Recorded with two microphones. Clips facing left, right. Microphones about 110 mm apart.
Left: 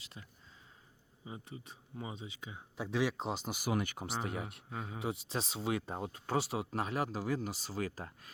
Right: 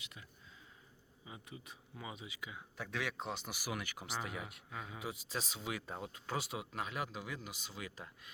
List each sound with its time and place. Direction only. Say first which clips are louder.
0.0 s speech: left 2 dB; 35° left (ahead or behind)